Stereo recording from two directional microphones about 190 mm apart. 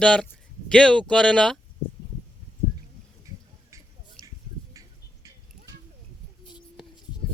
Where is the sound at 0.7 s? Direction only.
5° left (ahead or behind).